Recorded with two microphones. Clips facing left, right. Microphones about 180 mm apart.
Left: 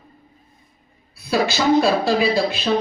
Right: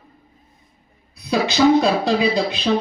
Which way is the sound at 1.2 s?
20° right (ahead or behind).